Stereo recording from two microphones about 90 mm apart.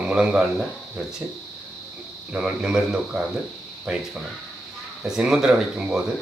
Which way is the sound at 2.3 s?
10° right (ahead or behind).